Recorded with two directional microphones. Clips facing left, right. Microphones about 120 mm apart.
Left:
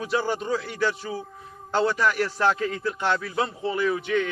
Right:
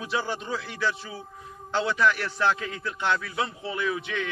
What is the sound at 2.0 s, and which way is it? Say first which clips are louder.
A man's voice: left 1 dB; 35° left (ahead or behind).